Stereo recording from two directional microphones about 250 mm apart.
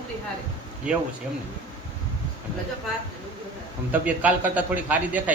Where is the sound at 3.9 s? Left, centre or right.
Centre.